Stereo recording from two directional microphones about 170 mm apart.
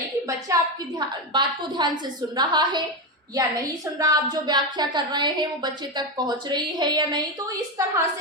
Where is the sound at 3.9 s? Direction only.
20° right (ahead or behind).